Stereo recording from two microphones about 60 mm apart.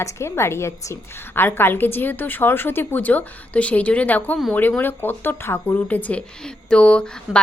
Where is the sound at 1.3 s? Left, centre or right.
Left.